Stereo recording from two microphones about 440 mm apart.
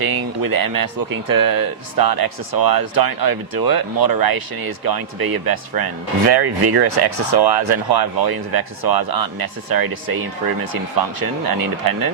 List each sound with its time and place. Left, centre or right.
0.0 s speech: right
10.9 s speech: right